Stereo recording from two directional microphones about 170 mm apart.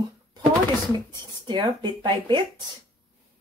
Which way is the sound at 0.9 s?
25° right (ahead or behind).